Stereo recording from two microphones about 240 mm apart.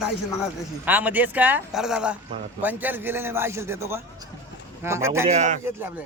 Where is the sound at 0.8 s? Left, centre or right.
Centre.